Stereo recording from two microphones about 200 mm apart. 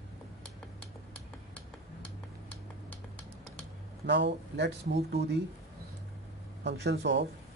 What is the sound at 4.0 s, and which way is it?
Speech, 60° right (ahead or behind).